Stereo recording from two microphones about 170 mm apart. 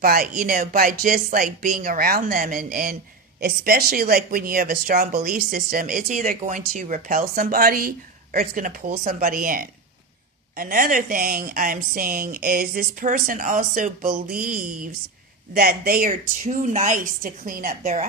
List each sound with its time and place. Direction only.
0.0 s speech: 60° right (ahead or behind)